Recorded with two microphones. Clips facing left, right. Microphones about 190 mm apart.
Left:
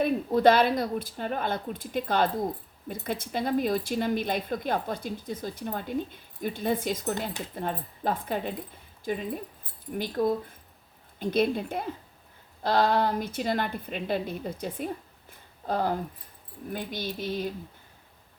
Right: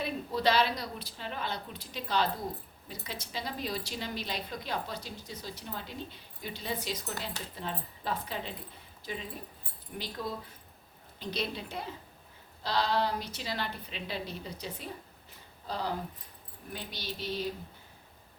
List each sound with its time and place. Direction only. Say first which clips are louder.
0.0 s speech: left 9 dB; 50° left (ahead or behind)